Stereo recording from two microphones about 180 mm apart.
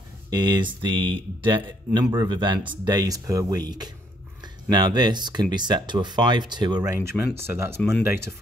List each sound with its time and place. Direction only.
0.3 s speech: 25° right (ahead or behind)